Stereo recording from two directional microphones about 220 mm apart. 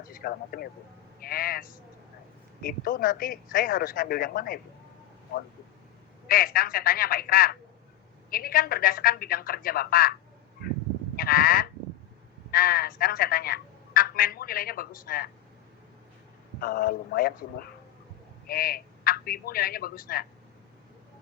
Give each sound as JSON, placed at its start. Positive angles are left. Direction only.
{"t": 0.0, "sound": "a man's voice", "side_deg": 40}
{"t": 6.2, "sound": "a man's voice", "side_deg": 40}
{"t": 11.2, "sound": "a man's voice", "side_deg": 40}
{"t": 16.6, "sound": "a man's voice", "side_deg": 45}